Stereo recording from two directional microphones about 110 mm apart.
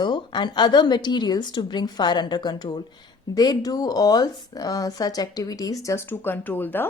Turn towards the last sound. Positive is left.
turn(degrees=20)  # may be behind; listen again after turning